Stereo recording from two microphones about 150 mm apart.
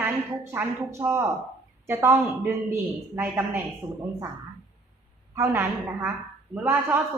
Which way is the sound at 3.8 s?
35° right (ahead or behind).